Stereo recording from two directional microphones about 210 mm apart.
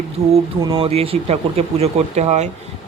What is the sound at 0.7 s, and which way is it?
Speech, 25° right (ahead or behind).